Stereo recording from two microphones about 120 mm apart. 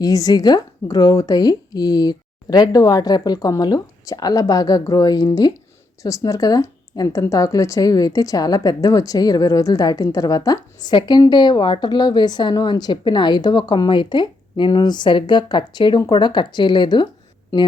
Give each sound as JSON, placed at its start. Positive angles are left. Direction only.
{"t": 0.0, "sound": "speech", "side_deg": 30}